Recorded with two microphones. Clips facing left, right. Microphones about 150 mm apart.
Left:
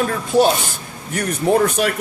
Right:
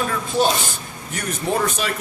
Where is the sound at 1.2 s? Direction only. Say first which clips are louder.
Left 6 dB; 60° left (ahead or behind).